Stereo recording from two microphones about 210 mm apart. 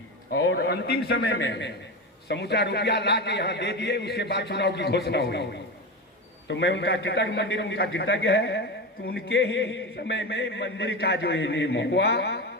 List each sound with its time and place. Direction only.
0.4 s a man's voice: 50° left (ahead or behind)
6.5 s a man's voice: 60° left (ahead or behind)